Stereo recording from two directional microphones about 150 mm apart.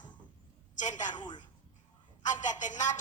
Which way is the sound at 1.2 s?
30° left (ahead or behind).